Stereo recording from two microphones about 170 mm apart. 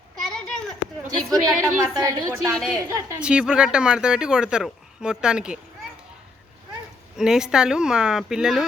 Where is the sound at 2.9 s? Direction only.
20° right (ahead or behind).